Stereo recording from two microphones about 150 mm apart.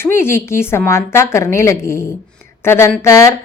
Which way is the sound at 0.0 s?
15° left (ahead or behind).